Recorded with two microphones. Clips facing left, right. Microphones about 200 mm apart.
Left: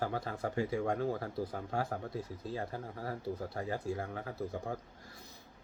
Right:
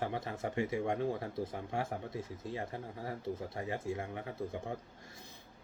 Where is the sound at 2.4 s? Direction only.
30° left (ahead or behind).